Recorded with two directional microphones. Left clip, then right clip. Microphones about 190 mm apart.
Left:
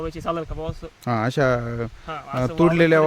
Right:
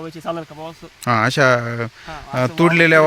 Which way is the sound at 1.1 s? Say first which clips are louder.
Right 6 dB; centre (ahead or behind).